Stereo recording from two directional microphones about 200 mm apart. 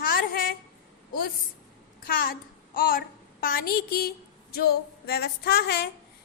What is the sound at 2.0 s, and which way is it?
A child's voice, 45° left (ahead or behind).